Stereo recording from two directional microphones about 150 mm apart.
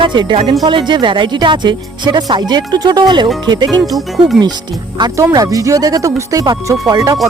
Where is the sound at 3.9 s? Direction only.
Centre (ahead or behind).